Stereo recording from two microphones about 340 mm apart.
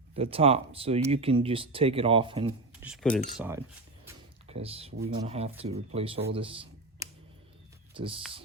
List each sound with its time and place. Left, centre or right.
0.2 s speech: centre
2.8 s speech: centre
4.4 s speech: centre
7.0 s a sound: centre
7.9 s speech: centre